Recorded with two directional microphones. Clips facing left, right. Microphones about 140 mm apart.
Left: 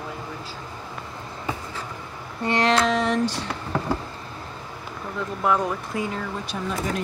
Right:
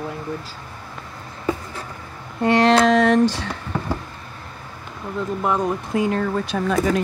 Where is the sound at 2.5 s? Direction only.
40° right (ahead or behind).